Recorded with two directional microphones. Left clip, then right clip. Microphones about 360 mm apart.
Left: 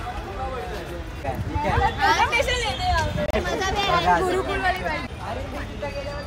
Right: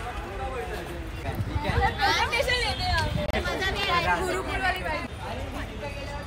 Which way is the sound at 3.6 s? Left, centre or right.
Left.